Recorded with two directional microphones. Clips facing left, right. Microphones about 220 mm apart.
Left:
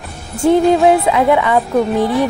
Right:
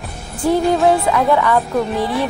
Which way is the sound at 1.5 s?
Centre (ahead or behind).